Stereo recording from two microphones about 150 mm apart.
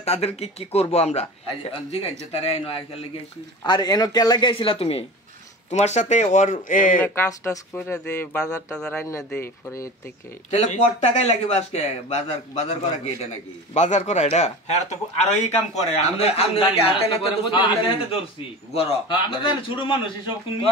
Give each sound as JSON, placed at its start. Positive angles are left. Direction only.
{"t": 0.0, "sound": "a man's voice", "side_deg": 45}
{"t": 3.6, "sound": "speech", "side_deg": 25}
{"t": 5.7, "sound": "speech", "side_deg": 50}
{"t": 7.2, "sound": "speech", "side_deg": 15}
{"t": 8.7, "sound": "speech", "side_deg": 5}
{"t": 9.0, "sound": "speech", "side_deg": 20}
{"t": 10.5, "sound": "a man's voice", "side_deg": 50}
{"t": 18.7, "sound": "speech", "side_deg": 40}